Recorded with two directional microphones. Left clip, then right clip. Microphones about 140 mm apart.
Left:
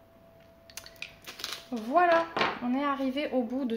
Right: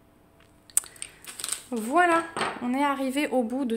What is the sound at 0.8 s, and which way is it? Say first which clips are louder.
Typing: right 12 dB; 65° right (ahead or behind).